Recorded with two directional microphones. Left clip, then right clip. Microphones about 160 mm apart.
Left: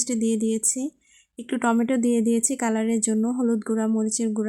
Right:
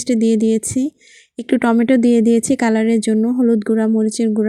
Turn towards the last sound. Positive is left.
turn(degrees=-25)  # may be behind; listen again after turning